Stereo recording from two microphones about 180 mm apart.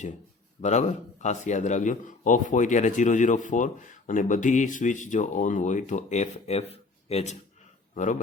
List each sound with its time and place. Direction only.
0.6 s a man's voice: 40° left (ahead or behind)